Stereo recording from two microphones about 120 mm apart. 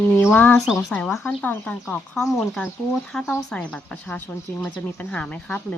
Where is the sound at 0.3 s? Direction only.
15° left (ahead or behind).